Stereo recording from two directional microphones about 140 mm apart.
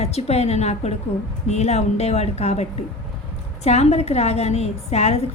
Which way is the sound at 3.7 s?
50° left (ahead or behind).